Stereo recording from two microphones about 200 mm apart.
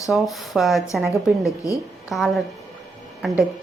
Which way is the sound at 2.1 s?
Centre (ahead or behind).